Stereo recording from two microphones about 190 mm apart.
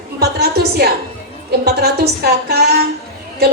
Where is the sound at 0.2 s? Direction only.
55° right (ahead or behind).